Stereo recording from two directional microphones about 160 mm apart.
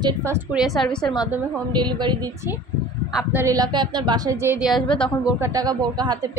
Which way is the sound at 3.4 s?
20° right (ahead or behind).